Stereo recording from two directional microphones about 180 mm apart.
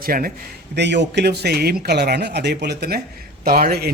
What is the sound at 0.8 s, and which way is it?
Speech, 70° right (ahead or behind).